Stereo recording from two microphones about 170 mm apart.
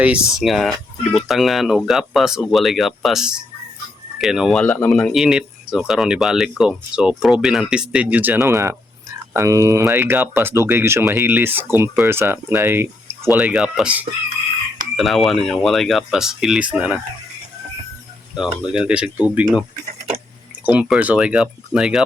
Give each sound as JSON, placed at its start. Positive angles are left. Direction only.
{"t": 0.0, "sound": "speech", "side_deg": -5}
{"t": 4.6, "sound": "speech", "side_deg": 10}
{"t": 18.3, "sound": "speech", "side_deg": -5}
{"t": 20.7, "sound": "speech", "side_deg": -5}